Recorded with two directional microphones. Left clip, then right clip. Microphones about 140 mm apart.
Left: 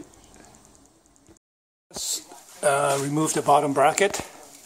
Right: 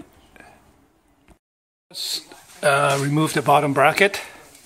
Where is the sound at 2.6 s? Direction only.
10° left (ahead or behind).